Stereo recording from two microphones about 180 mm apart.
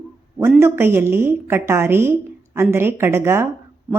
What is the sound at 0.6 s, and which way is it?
A woman's voice, 15° right (ahead or behind).